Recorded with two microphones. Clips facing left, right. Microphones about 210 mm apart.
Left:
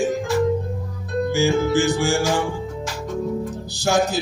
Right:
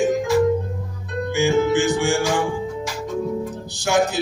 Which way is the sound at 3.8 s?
35° left (ahead or behind).